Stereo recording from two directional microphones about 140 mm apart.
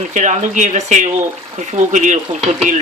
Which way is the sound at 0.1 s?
60° right (ahead or behind).